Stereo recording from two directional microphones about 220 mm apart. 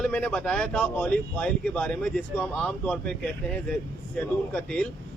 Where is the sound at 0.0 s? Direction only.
5° left (ahead or behind).